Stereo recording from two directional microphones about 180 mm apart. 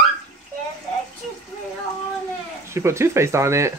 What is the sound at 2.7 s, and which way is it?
Speech, 15° right (ahead or behind).